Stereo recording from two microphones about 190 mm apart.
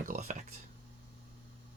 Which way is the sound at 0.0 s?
40° right (ahead or behind).